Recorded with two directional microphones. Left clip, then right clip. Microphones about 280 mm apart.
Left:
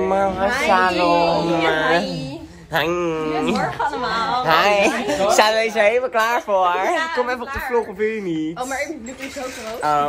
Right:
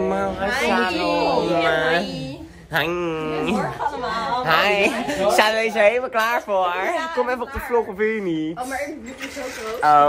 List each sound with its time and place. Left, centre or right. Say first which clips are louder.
0.0 s a woman's voice: left 4 dB; centre
0.9 s speech: left 3 dB; centre
1.4 s a woman's voice: left 1 dB; centre
9.8 s speech: right 5 dB; centre